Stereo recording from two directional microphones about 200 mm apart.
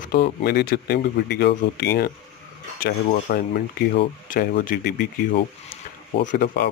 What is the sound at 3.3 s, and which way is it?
Speech, 45° left (ahead or behind).